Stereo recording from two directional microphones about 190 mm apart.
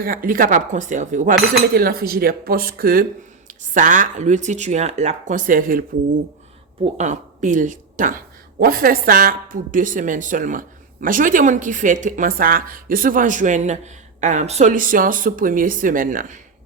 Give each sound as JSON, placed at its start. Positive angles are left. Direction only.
{"t": 0.0, "sound": "a woman's voice", "side_deg": -50}
{"t": 1.4, "sound": "a woman's voice", "side_deg": -55}
{"t": 6.8, "sound": "a woman's voice", "side_deg": -40}